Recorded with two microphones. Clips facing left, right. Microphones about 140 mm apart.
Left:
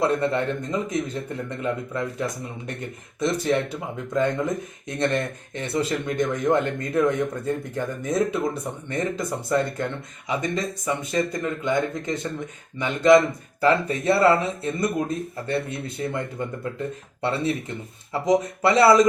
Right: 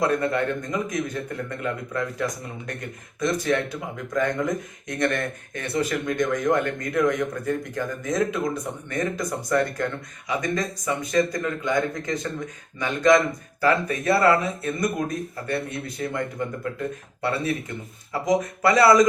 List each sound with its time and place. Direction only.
0.0 s speech: 25° left (ahead or behind)